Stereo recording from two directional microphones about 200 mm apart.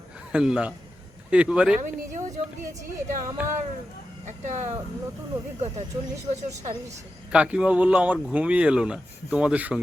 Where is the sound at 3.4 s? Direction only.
5° right (ahead or behind).